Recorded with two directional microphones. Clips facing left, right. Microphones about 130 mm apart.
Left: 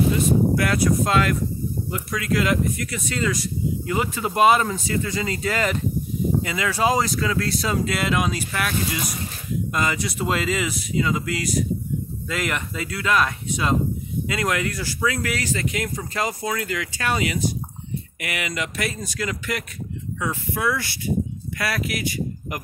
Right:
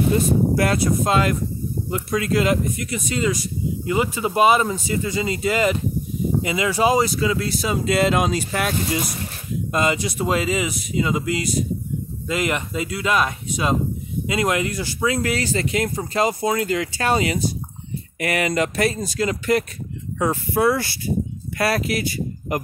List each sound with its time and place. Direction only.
0.6 s speech: 30° right (ahead or behind); by 7.8 s 10° right (ahead or behind)
7.8 s speech: 30° right (ahead or behind)